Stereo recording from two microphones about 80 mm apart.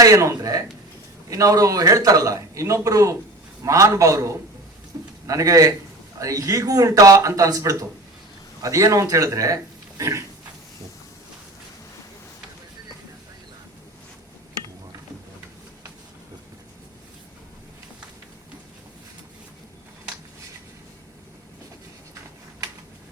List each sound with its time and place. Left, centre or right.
0.0 s a man's voice: right